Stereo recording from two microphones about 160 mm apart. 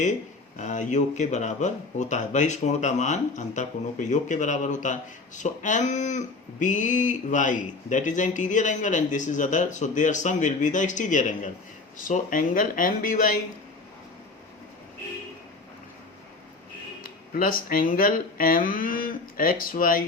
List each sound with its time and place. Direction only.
0.5 s speech: 50° left (ahead or behind)
17.0 s speech: 60° left (ahead or behind)